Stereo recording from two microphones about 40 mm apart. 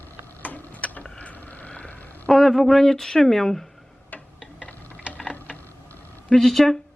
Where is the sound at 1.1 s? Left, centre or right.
Left.